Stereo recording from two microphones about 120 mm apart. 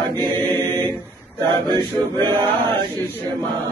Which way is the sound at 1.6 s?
35° right (ahead or behind).